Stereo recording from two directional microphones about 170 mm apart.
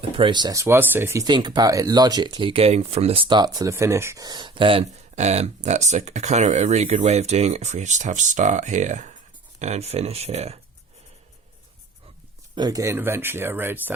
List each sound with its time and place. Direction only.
0.2 s speech: 25° right (ahead or behind)
12.5 s speech: 20° right (ahead or behind)